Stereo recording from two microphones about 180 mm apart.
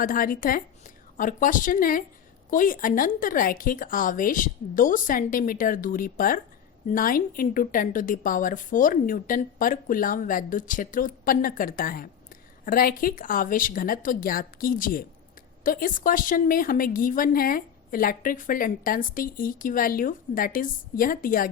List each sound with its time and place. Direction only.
0.0 s a woman's voice: 50° left (ahead or behind)